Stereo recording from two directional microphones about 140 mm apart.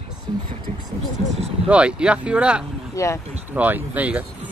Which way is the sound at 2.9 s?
20° left (ahead or behind).